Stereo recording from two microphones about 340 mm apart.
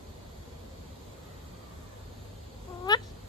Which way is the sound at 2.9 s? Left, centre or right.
Centre.